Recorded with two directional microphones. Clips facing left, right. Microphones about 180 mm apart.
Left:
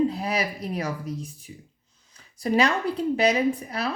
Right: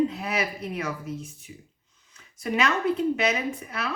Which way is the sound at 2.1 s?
35° left (ahead or behind).